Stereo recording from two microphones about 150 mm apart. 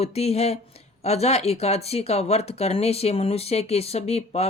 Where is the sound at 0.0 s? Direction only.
45° left (ahead or behind).